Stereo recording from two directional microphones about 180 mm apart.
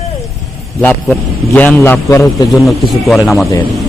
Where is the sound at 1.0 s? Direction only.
5° left (ahead or behind).